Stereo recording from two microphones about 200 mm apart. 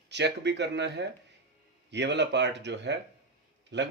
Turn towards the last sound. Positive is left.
turn(degrees=-60)  # may be behind; listen again after turning